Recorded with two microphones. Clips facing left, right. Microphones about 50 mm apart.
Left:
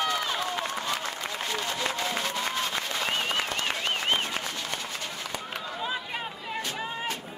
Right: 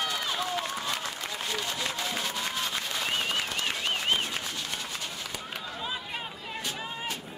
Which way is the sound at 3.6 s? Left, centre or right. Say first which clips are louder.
Left 1 dB; centre.